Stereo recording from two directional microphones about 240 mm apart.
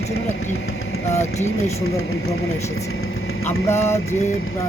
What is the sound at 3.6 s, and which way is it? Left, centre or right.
Mantra, centre.